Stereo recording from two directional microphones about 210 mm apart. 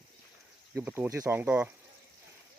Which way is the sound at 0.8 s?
10° right (ahead or behind).